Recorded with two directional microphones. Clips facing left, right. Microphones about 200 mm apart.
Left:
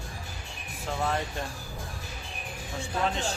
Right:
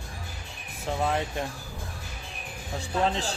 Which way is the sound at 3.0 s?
35° right (ahead or behind).